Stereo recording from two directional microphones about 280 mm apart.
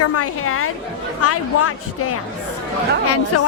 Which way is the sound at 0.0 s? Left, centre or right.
Left.